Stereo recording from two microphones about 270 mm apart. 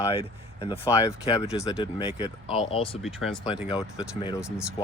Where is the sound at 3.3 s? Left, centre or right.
Centre.